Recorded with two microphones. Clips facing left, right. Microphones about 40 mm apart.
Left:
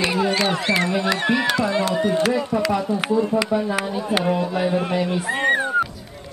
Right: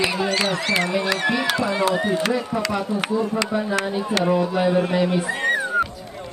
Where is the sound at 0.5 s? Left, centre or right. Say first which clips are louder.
Left 1 dB; left.